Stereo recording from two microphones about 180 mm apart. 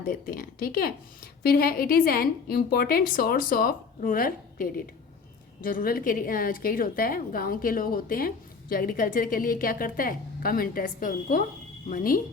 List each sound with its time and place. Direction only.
0.0 s a woman's voice: 50° left (ahead or behind)